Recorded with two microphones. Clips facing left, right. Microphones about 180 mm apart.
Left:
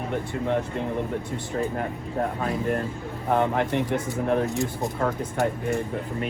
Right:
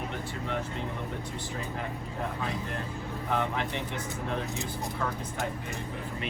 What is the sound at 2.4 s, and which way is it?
Speech, 55° left (ahead or behind).